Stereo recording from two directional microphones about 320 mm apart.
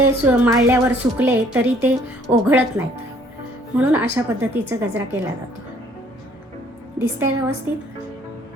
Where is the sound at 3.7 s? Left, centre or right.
Centre.